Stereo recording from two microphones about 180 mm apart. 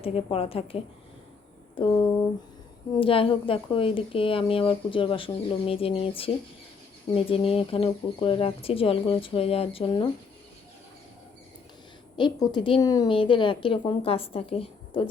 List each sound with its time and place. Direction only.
0.0 s speech: 30° left (ahead or behind)
3.0 s speech: 30° left (ahead or behind)
12.1 s speech: 25° left (ahead or behind)